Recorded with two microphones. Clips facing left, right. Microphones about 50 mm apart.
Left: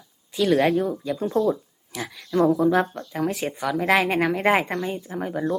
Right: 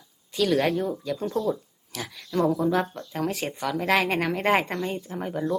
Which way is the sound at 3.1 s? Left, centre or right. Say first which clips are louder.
Left 3 dB; centre.